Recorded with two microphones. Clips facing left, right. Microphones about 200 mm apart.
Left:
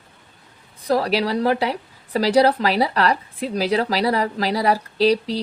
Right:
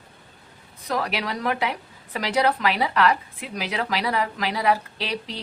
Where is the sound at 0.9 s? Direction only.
35° left (ahead or behind).